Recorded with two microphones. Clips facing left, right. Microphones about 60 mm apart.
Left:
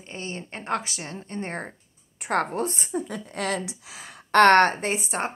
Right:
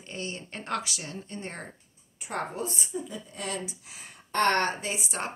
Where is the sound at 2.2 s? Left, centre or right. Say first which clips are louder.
Left 8 dB; left.